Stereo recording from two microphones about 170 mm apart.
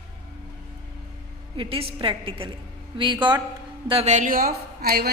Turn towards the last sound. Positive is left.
turn(degrees=-65)  # may be behind; listen again after turning